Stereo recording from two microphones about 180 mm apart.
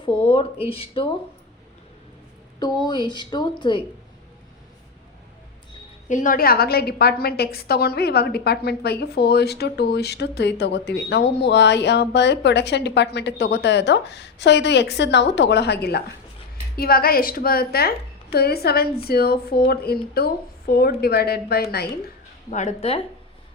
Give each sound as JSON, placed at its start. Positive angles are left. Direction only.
{"t": 0.0, "sound": "speech", "side_deg": 30}
{"t": 2.6, "sound": "speech", "side_deg": 25}
{"t": 6.1, "sound": "a woman's voice", "side_deg": 45}
{"t": 22.4, "sound": "speech", "side_deg": 40}